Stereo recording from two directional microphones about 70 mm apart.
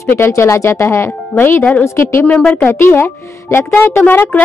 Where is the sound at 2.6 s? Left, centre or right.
Left.